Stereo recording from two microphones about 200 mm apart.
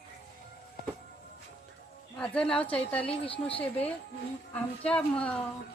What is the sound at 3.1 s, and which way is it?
Speech, 30° left (ahead or behind).